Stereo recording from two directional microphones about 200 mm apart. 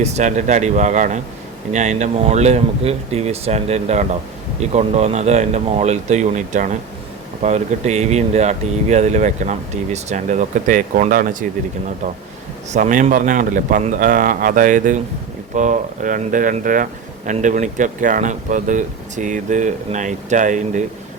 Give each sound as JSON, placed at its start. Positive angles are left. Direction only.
{"t": 0.0, "sound": "speech", "side_deg": -35}
{"t": 12.7, "sound": "speech", "side_deg": -40}